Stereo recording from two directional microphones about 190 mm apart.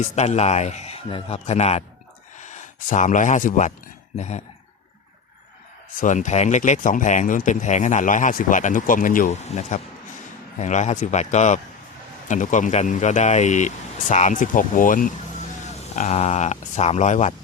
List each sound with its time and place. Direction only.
0.0 s speech: 35° left (ahead or behind)
6.0 s speech: 40° left (ahead or behind)